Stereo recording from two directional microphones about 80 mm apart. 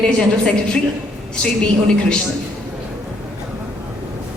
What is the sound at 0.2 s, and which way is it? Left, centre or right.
Speech, centre.